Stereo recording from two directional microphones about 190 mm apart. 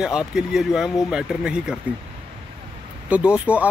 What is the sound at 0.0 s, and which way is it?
Speech, 5° right (ahead or behind).